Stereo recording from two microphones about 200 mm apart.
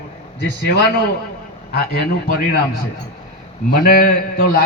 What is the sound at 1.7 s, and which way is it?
Speech, 50° left (ahead or behind).